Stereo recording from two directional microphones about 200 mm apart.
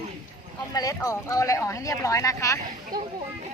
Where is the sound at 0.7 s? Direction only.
15° left (ahead or behind).